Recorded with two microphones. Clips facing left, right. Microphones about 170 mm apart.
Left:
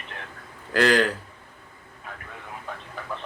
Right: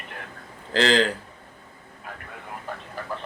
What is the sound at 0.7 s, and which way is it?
Speech, 25° right (ahead or behind).